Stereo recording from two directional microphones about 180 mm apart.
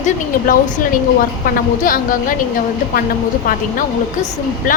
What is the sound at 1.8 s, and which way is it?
Speech, 50° left (ahead or behind).